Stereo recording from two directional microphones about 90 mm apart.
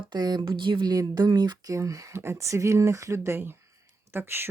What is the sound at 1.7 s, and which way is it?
Speech, 35° right (ahead or behind).